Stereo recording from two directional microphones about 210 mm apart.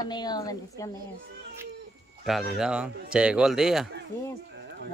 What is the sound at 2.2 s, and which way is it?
Speech, centre (ahead or behind).